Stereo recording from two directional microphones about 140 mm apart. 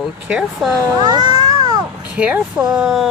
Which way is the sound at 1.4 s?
30° right (ahead or behind).